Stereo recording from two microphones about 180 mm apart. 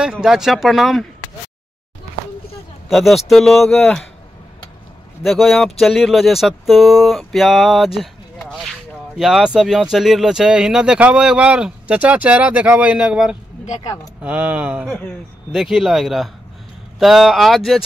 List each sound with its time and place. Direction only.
0.0 s speech: 5° right (ahead or behind)
2.9 s speech: centre (ahead or behind)
5.2 s speech: centre (ahead or behind)
14.9 s speech: 10° left (ahead or behind)
15.5 s speech: centre (ahead or behind)